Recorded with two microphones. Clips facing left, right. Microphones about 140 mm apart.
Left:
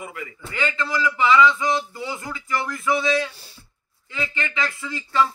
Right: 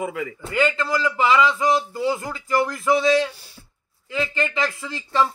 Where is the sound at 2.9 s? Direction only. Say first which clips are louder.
Right 3 dB; centre (ahead or behind).